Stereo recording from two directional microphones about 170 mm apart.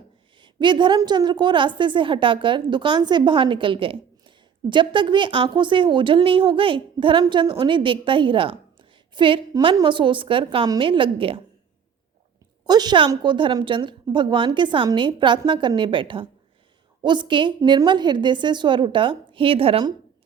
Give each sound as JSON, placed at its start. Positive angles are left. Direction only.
{"t": 0.4, "sound": "speech", "side_deg": -30}
{"t": 12.6, "sound": "speech", "side_deg": -25}